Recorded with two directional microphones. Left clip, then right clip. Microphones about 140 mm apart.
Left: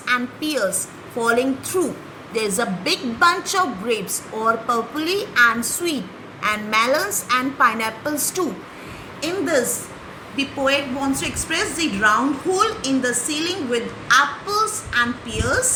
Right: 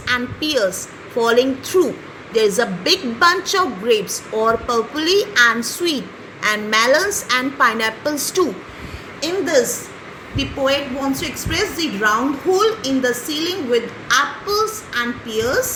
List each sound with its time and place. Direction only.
1.2 s a woman's voice: 30° right (ahead or behind)
9.2 s a woman's voice: 45° right (ahead or behind)